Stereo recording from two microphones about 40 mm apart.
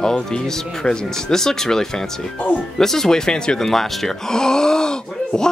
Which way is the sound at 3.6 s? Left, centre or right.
Centre.